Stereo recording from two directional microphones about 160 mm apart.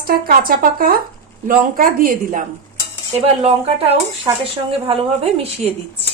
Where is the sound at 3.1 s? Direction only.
40° right (ahead or behind).